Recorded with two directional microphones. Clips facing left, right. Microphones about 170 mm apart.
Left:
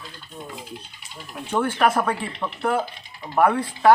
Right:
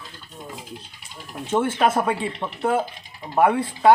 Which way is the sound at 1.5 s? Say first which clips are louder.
Right 1 dB; 25° right (ahead or behind).